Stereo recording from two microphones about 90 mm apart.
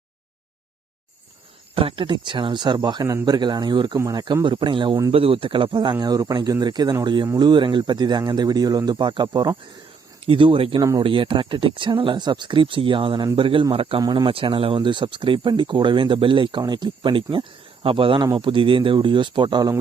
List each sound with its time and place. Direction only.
1.7 s speech: 85° right; by 3.9 s 55° right (ahead or behind)
3.9 s speech: 40° right (ahead or behind)
4.4 s speech: 65° right (ahead or behind)
5.1 s speech: 90° right; by 9.6 s 50° right (ahead or behind)
10.2 s speech: 75° right (ahead or behind)
14.0 s speech: 45° right (ahead or behind)
14.3 s speech: 70° right (ahead or behind)
17.8 s speech: 80° right
18.3 s speech: 70° right (ahead or behind)